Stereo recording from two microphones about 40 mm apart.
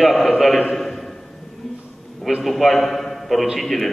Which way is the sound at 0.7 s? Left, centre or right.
Centre.